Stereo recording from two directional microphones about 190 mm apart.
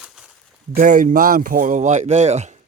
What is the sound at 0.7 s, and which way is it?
A man's voice, 45° right (ahead or behind).